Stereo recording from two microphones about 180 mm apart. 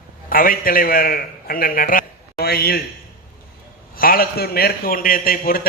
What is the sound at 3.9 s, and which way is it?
A man's voice, 55° left (ahead or behind).